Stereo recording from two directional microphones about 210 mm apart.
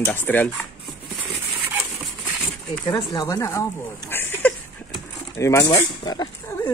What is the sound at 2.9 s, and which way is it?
Speech, 20° left (ahead or behind).